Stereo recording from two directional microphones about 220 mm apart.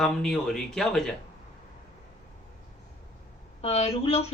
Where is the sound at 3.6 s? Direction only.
25° left (ahead or behind).